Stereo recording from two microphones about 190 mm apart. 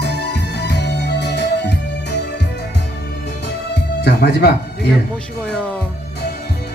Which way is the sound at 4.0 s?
60° left (ahead or behind).